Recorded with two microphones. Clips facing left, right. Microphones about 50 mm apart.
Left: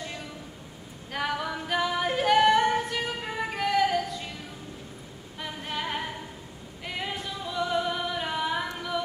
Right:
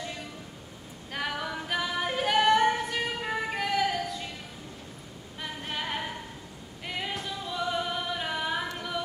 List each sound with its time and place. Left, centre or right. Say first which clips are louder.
1.1 s singing: left 3 dB; centre
5.4 s female singing: left 2 dB; centre
6.8 s a sound: left 1 dB; centre
7.5 s music: left 3 dB; centre